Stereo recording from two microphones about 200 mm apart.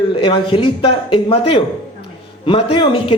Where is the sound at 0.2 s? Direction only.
25° left (ahead or behind).